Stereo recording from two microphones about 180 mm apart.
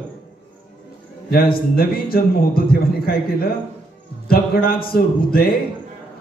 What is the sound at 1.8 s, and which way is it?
Speech, 55° left (ahead or behind).